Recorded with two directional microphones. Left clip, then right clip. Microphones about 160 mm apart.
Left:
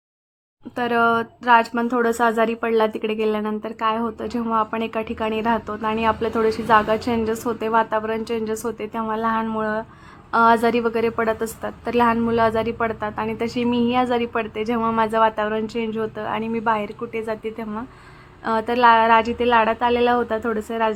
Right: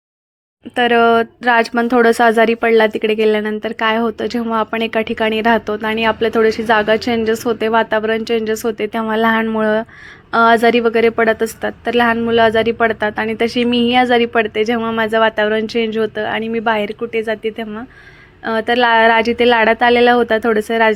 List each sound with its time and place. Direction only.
0.8 s speech: 20° right (ahead or behind)
1.5 s speech: 30° right (ahead or behind)